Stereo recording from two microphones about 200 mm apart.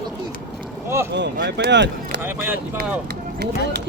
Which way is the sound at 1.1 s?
60° right (ahead or behind).